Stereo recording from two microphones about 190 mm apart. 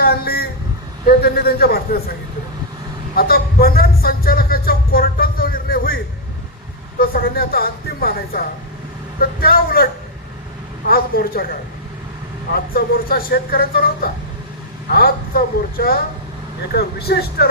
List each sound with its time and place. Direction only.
0.0 s a sound: 55° left (ahead or behind)
1.0 s a man's voice: 55° left (ahead or behind)
3.2 s a sound: 55° left (ahead or behind)
7.0 s speech: 50° left (ahead or behind)
10.8 s speech: 50° left (ahead or behind)
12.5 s a man's voice: 50° left (ahead or behind)